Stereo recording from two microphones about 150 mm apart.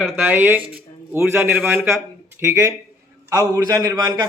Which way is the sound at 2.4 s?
20° right (ahead or behind).